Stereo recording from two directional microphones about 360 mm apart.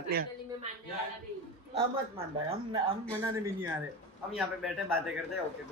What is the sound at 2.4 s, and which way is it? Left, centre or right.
Speech, centre.